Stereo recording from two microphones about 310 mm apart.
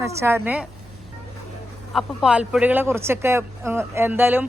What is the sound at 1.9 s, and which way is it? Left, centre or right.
Speech, centre.